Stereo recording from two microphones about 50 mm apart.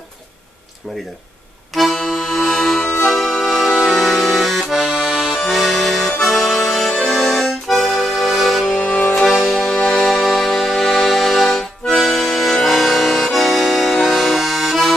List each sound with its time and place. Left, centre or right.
1.8 s accordion: centre
4.9 s accordion: centre
5.4 s accordion: centre
6.7 s music: centre
7.1 s accordion: centre
8.7 s music: left
9.1 s music: centre
10.0 s music: centre
10.4 s music: centre
11.5 s accordion: centre